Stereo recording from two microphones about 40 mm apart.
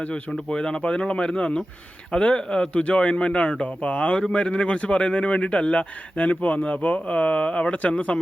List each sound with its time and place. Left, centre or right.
0.0 s speech: left
4.2 s speech: centre